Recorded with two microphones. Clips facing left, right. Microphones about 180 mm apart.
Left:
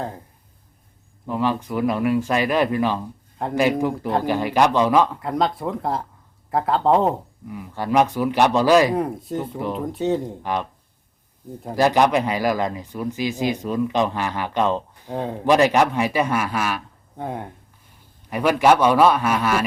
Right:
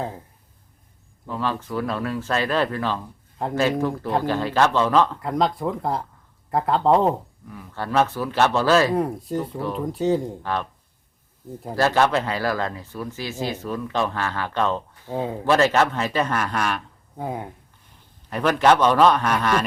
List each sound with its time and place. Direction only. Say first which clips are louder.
1.3 s speech: left 4 dB; 15° left (ahead or behind)
5.2 s speech: even; centre (ahead or behind)
7.4 s speech: left 5 dB; 15° left (ahead or behind)
9.0 s speech: even; centre (ahead or behind)
10.4 s speech: left 2 dB; 15° left (ahead or behind)
11.7 s speech: left 2 dB; 15° left (ahead or behind)
15.1 s speech: even; 5° right (ahead or behind)
15.4 s speech: left 2 dB; 15° left (ahead or behind); by 17.5 s centre (ahead or behind)
18.3 s speech: left 1 dB; 10° left (ahead or behind)